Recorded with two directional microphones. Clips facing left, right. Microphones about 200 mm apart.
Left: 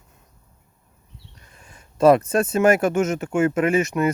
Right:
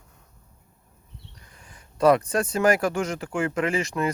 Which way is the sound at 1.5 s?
25° left (ahead or behind).